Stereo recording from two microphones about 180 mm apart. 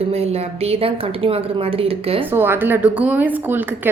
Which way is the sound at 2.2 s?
10° right (ahead or behind).